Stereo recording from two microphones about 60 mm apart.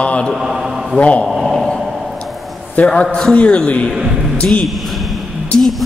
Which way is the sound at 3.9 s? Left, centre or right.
Centre.